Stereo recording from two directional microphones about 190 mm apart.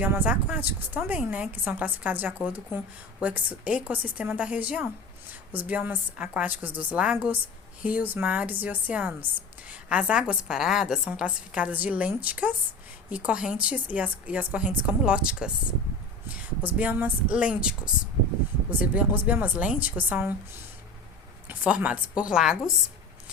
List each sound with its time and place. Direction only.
0.0 s speech: 10° right (ahead or behind)